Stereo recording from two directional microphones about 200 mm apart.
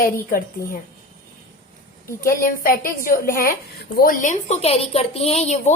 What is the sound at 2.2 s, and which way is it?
A woman's voice, 45° left (ahead or behind).